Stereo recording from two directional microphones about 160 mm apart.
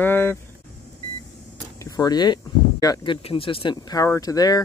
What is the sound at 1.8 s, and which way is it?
Speech, 25° left (ahead or behind).